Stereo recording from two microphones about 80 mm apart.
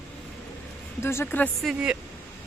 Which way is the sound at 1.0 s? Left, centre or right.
Left.